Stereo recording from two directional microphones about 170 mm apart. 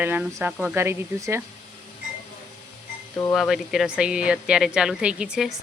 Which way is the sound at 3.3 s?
Centre (ahead or behind).